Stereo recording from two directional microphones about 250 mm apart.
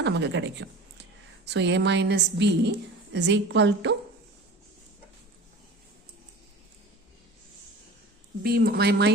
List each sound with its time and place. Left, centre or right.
0.0 s a woman's voice: right
8.4 s speech: right